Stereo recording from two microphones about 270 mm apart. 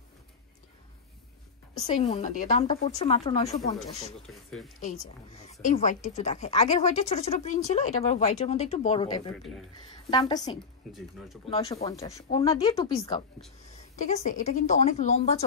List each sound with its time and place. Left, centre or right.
1.8 s a woman's voice: left
4.3 s speech: centre
5.6 s a woman's voice: left
10.9 s speech: centre
11.5 s a woman's voice: centre
13.9 s a woman's voice: left